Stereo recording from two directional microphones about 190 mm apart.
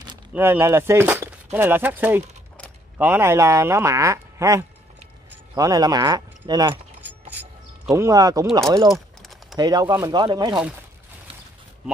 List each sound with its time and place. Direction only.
0.3 s speech: 10° right (ahead or behind)
7.2 s a sound: 10° right (ahead or behind)
8.5 s speech: 15° right (ahead or behind)
9.2 s typing: centre (ahead or behind)
9.6 s speech: 20° right (ahead or behind)